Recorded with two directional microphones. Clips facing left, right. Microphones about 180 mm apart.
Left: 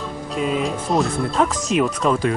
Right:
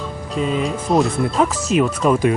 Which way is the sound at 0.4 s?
Centre (ahead or behind).